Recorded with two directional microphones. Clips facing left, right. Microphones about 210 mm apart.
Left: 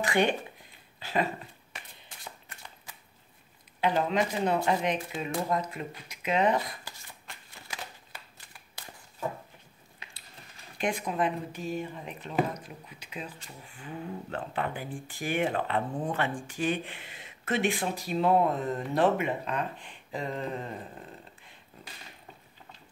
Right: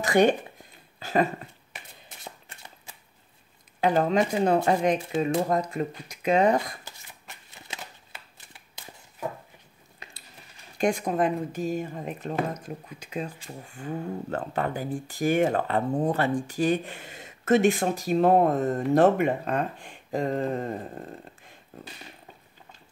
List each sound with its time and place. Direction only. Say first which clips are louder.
0.0 s speech: right 6 dB; 40° right (ahead or behind)
0.9 s a sound: right 5 dB; 45° right (ahead or behind)
2.2 s a sound: right 2 dB; 25° right (ahead or behind)
3.8 s speech: right 4 dB; 45° right (ahead or behind)
6.8 s shuffling cards: even; 20° right (ahead or behind)
10.8 s speech: right 5 dB; 45° right (ahead or behind)